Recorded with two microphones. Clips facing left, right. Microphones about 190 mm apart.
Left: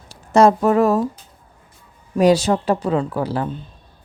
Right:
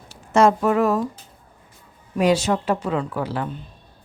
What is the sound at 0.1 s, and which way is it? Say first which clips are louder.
Speech: left 3 dB; 35° left (ahead or behind).